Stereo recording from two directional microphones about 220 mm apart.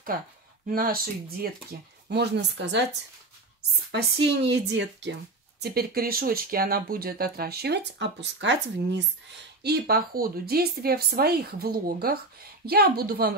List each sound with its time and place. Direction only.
1.4 s speech: 45° right (ahead or behind)
3.9 s speech: 50° right (ahead or behind)